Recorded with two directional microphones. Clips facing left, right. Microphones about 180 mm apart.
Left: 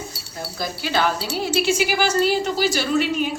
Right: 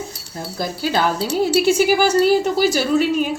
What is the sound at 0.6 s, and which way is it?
A woman's voice, 45° right (ahead or behind).